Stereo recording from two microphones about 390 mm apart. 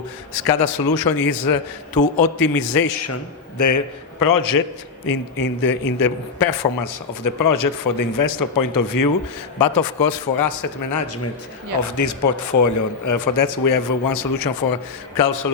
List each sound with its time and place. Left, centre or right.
0.6 s a man's voice: left
3.6 s a man's voice: left